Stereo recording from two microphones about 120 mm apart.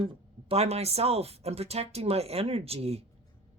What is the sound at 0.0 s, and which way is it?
Speech, 50° right (ahead or behind).